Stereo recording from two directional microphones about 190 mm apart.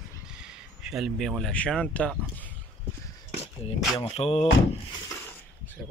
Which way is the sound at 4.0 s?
30° left (ahead or behind).